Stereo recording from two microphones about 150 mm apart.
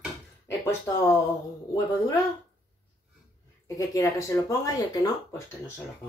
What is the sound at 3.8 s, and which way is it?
Speech, 20° left (ahead or behind).